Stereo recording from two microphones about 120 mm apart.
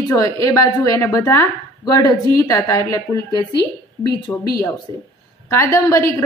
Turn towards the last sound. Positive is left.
turn(degrees=25)  # may be behind; listen again after turning